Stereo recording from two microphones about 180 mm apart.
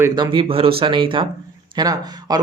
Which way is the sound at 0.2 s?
30° right (ahead or behind).